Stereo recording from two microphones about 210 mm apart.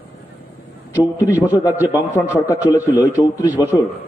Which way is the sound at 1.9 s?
15° left (ahead or behind).